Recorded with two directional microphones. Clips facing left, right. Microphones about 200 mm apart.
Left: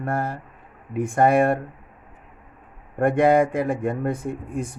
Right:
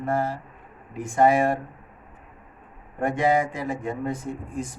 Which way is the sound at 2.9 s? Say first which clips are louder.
Left 5 dB; 60° left (ahead or behind).